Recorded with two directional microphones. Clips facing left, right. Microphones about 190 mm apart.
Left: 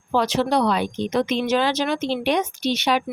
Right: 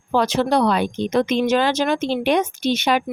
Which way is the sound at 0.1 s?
50° right (ahead or behind).